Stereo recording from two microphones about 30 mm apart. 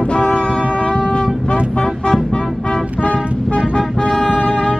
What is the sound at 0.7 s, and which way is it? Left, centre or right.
Wind instrument, left.